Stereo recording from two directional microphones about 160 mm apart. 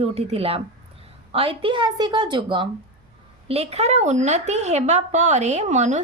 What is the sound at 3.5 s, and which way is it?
A woman's voice, 40° right (ahead or behind).